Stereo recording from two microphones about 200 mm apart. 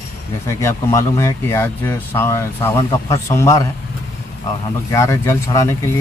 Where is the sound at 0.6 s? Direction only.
15° left (ahead or behind).